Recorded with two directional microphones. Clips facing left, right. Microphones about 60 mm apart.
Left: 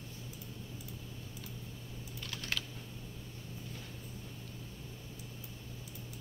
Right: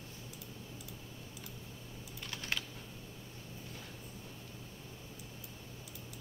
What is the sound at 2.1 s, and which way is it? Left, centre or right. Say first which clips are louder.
Typing: even; centre.